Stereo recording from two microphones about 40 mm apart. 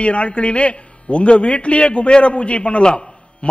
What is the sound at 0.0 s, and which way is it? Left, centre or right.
A man's voice, left.